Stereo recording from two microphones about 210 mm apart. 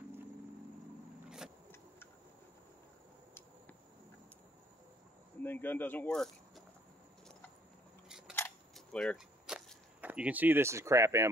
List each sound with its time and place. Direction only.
5.4 s speech: 10° left (ahead or behind)
8.4 s keys jangling: 5° left (ahead or behind); by 11.2 s 15° right (ahead or behind)